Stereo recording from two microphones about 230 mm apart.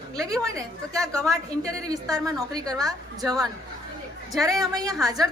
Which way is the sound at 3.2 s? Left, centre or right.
Centre.